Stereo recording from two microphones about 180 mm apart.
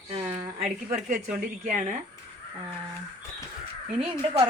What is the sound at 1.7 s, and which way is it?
Speech, 45° right (ahead or behind).